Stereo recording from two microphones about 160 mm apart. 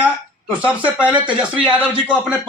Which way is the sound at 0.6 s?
10° right (ahead or behind).